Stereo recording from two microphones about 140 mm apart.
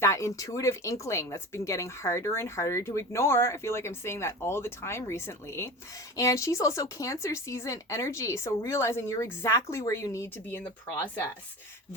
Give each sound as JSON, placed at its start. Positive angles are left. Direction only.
{"t": 0.0, "sound": "speech", "side_deg": 20}